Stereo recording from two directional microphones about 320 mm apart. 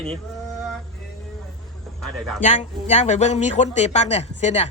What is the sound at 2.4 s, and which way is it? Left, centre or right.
Speech, left.